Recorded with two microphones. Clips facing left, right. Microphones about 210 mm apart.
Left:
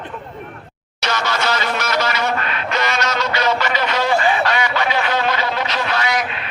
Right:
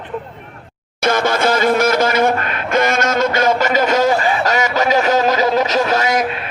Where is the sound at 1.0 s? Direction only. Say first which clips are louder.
Right 7 dB; 50° right (ahead or behind).